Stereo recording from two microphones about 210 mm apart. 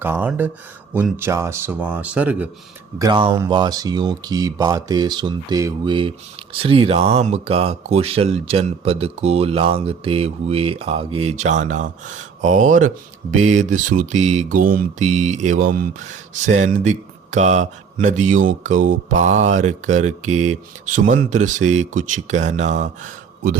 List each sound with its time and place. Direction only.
0.0 s speech: 10° right (ahead or behind)
3.0 s speech: 25° right (ahead or behind)